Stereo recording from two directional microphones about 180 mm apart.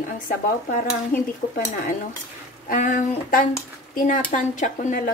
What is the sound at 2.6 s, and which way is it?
Speech, 50° left (ahead or behind).